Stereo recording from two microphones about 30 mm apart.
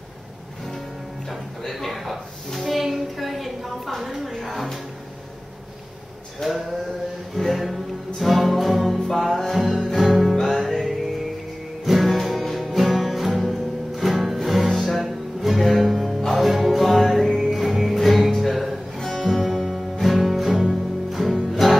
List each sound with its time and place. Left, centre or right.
1.6 s a man's voice: centre
2.6 s a sound: centre
4.4 s music: centre
6.4 s a sound: centre
7.3 s music: centre
11.8 s music: centre
18.9 s music: centre